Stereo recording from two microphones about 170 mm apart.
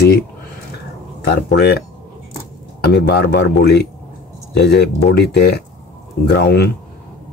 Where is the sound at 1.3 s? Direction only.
70° left (ahead or behind).